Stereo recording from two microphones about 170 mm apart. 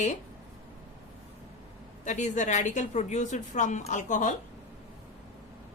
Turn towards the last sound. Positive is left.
turn(degrees=50)  # may be behind; listen again after turning